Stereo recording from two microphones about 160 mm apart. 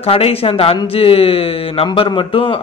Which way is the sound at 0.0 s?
40° left (ahead or behind).